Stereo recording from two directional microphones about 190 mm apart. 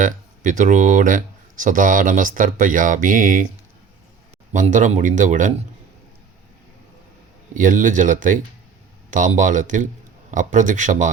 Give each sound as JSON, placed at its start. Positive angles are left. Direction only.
{"t": 0.0, "sound": "speech", "side_deg": -45}
{"t": 4.5, "sound": "speech", "side_deg": -40}
{"t": 7.5, "sound": "speech", "side_deg": -45}